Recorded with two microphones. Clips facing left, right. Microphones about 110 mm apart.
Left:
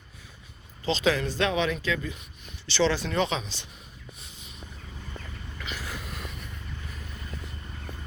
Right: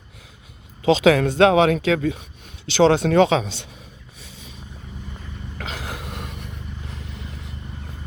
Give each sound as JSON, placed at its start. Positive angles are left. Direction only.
{"t": 0.8, "sound": "speech", "side_deg": -65}
{"t": 2.7, "sound": "speech", "side_deg": -55}
{"t": 3.0, "sound": "speech", "side_deg": -90}
{"t": 5.5, "sound": "a sound", "side_deg": -90}